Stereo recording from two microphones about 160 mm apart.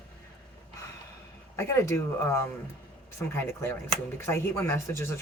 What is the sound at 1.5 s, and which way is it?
Speech, 15° left (ahead or behind).